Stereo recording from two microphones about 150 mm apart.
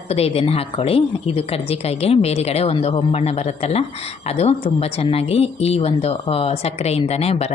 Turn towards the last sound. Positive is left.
turn(degrees=45)  # may be behind; listen again after turning